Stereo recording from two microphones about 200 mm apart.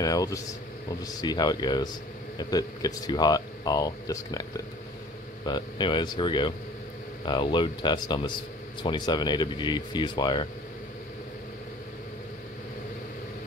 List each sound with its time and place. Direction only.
0.0 s speech: 20° left (ahead or behind)